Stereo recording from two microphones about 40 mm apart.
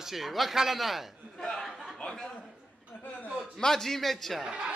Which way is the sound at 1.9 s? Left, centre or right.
Centre.